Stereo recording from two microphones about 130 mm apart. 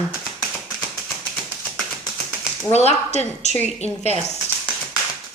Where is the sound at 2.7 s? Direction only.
60° left (ahead or behind).